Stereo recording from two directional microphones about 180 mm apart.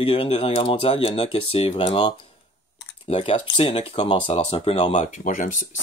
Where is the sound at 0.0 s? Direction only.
30° left (ahead or behind).